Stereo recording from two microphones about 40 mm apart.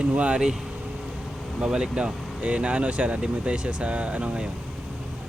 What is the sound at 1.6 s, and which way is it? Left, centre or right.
Speech, right.